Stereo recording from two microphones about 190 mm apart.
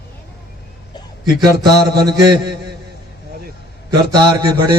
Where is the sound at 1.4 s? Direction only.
20° right (ahead or behind).